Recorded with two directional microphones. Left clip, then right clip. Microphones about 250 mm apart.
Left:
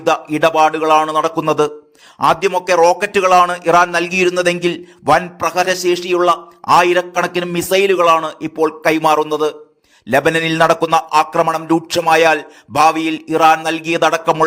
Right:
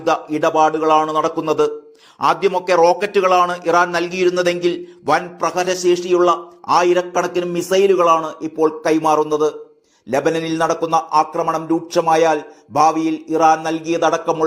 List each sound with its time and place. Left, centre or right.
0.3 s a man's voice: left